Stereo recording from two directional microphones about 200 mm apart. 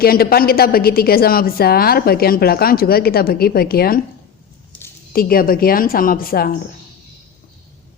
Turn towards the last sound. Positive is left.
turn(degrees=45)  # may be behind; listen again after turning